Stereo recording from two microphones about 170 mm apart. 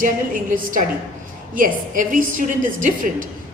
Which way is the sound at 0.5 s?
50° right (ahead or behind).